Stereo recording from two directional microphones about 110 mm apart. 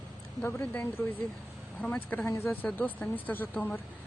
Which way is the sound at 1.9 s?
15° left (ahead or behind).